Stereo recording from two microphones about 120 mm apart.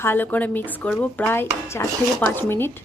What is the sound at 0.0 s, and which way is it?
A woman's voice, 15° left (ahead or behind).